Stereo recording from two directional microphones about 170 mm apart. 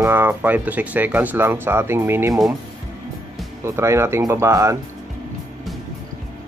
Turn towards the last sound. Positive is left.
turn(degrees=-20)  # may be behind; listen again after turning